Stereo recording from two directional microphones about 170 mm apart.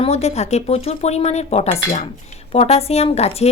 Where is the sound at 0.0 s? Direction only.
40° left (ahead or behind).